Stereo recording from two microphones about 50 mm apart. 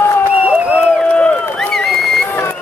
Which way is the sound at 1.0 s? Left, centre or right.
Left.